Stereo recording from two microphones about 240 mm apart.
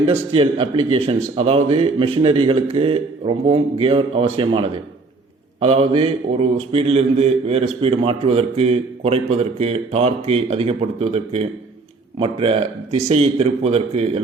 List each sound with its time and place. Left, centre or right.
0.1 s a man's voice: right